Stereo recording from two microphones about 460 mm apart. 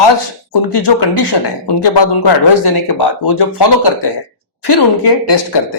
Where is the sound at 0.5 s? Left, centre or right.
Left.